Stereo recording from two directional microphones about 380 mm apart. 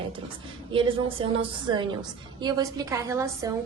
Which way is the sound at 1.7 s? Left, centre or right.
Centre.